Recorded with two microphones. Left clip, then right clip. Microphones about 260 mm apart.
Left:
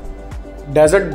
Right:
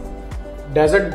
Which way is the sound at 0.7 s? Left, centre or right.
Left.